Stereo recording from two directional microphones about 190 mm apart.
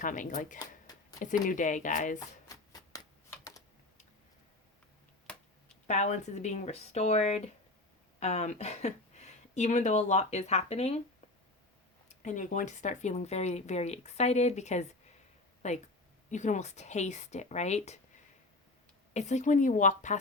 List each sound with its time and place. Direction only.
0.0 s speech: 45° left (ahead or behind)
2.1 s shuffling cards: 20° left (ahead or behind)
5.9 s speech: 35° left (ahead or behind)
12.0 s speech: 40° left (ahead or behind)
19.1 s speech: 35° left (ahead or behind)